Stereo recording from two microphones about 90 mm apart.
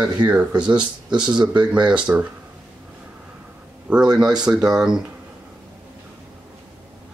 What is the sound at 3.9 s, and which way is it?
Speech, 10° right (ahead or behind).